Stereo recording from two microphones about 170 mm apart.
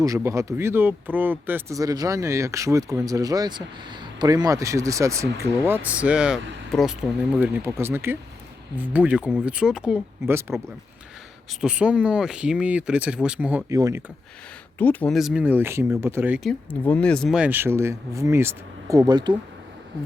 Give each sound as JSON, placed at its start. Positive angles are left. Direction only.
{"t": 0.0, "sound": "speech", "side_deg": -15}
{"t": 11.6, "sound": "speech", "side_deg": -5}
{"t": 13.7, "sound": "speech", "side_deg": -20}
{"t": 14.8, "sound": "speech", "side_deg": 10}
{"t": 15.1, "sound": "speech", "side_deg": -5}
{"t": 16.4, "sound": "speech", "side_deg": 5}